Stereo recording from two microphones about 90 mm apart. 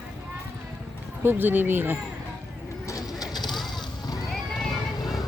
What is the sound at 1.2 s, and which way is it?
Speech, 20° right (ahead or behind).